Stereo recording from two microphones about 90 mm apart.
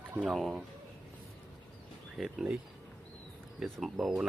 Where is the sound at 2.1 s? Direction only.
5° right (ahead or behind).